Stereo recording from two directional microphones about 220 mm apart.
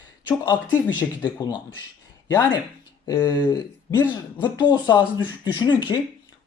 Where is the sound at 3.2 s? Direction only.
20° left (ahead or behind).